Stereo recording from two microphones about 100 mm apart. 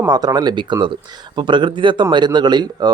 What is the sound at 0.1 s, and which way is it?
Speech, 45° right (ahead or behind).